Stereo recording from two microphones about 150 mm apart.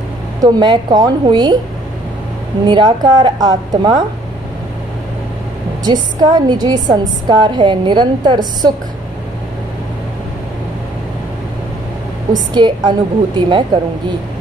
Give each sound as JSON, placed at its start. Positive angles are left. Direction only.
{"t": 0.4, "sound": "a woman's voice", "side_deg": -25}
{"t": 2.6, "sound": "a woman's voice", "side_deg": -30}
{"t": 5.9, "sound": "a woman's voice", "side_deg": -25}
{"t": 12.5, "sound": "a woman's voice", "side_deg": -30}